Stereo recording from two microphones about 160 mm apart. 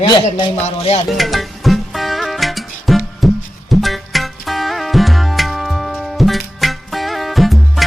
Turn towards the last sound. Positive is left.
turn(degrees=0)  # may be behind; listen again after turning